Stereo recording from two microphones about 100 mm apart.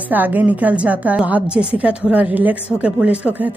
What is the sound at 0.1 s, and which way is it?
A woman's voice, 15° right (ahead or behind).